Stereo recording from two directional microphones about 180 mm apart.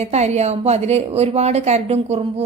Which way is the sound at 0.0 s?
40° right (ahead or behind).